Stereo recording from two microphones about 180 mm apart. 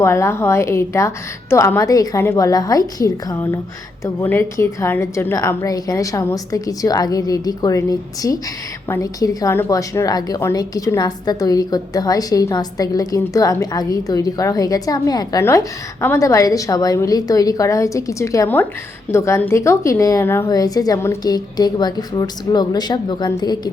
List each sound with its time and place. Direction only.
0.0 s a woman's voice: 15° left (ahead or behind)